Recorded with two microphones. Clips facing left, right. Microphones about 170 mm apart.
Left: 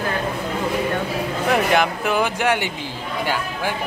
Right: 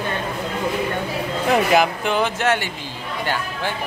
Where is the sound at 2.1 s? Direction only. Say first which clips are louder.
Even; 10° left (ahead or behind).